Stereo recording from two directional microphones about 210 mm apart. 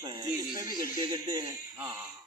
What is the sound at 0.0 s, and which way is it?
A man's voice, 20° right (ahead or behind).